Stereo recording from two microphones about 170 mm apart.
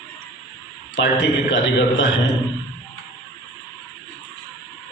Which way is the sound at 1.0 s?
90° left.